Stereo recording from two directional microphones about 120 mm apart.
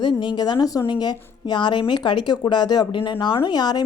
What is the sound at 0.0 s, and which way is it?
A woman's voice, 40° left (ahead or behind).